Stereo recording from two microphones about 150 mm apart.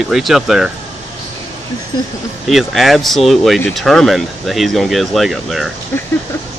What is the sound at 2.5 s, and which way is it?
Speech, centre (ahead or behind).